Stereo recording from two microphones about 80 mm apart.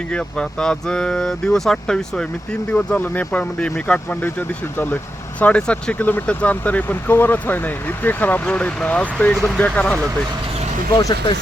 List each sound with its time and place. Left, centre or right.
0.1 s speech: centre
2.7 s speech: centre
9.3 s speech: centre
9.6 s speech: centre
10.9 s speech: left